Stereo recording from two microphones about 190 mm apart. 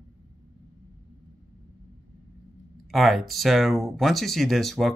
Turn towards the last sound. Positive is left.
turn(degrees=0)  # may be behind; listen again after turning